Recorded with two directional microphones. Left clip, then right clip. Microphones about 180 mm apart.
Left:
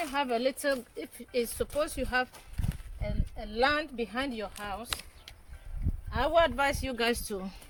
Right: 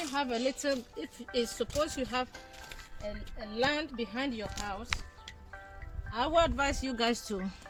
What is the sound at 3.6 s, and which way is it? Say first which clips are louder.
Speech: left 3 dB; 10° left (ahead or behind).